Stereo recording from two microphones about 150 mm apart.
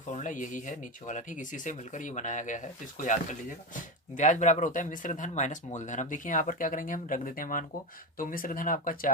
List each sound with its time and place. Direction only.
0.1 s speech: 55° left (ahead or behind)